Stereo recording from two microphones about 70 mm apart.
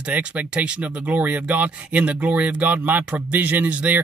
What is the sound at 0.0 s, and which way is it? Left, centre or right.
Speech, centre.